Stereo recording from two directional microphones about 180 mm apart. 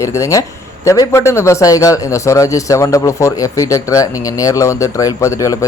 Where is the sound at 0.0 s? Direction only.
15° left (ahead or behind).